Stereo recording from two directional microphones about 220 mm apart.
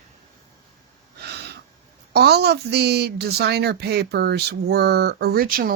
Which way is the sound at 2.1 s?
45° right (ahead or behind).